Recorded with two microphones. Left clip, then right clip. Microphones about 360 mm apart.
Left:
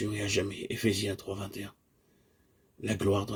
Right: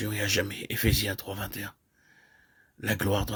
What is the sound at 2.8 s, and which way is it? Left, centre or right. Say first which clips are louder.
Speech: right 1 dB; right.